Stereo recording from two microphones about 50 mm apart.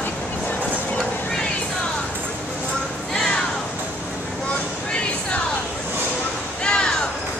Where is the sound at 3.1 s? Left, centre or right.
Centre.